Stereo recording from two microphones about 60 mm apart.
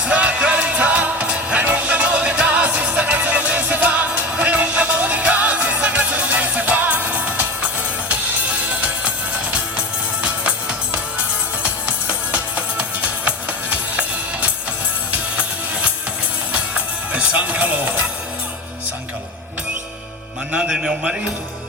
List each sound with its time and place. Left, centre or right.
0.0 s music: right
8.8 s music: right
10.9 s music: right
15.1 s music: right
20.7 s a sound: centre